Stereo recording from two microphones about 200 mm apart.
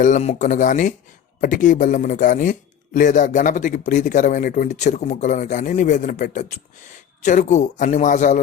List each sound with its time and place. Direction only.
0.0 s speech: 35° left (ahead or behind)